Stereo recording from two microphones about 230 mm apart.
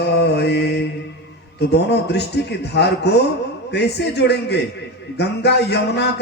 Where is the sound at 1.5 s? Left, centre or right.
Left.